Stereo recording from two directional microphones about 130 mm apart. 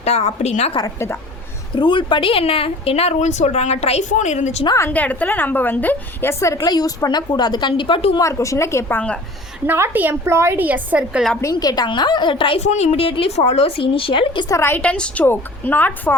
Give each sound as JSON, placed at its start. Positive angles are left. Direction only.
{"t": 0.0, "sound": "a woman's voice", "side_deg": 55}
{"t": 1.7, "sound": "speech", "side_deg": 40}
{"t": 4.1, "sound": "a woman's voice", "side_deg": 65}
{"t": 4.6, "sound": "a woman's voice", "side_deg": 25}
{"t": 4.9, "sound": "a woman's voice", "side_deg": 10}
{"t": 8.2, "sound": "a woman's voice", "side_deg": 25}
{"t": 9.6, "sound": "a woman's voice", "side_deg": -20}
{"t": 11.5, "sound": "a woman's voice", "side_deg": 30}
{"t": 12.5, "sound": "speech", "side_deg": 60}
{"t": 14.5, "sound": "a woman's voice", "side_deg": 20}
{"t": 14.8, "sound": "a woman's voice", "side_deg": 10}